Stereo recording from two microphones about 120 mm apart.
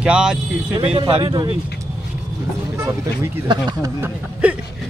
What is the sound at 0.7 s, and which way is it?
Speech, 55° right (ahead or behind).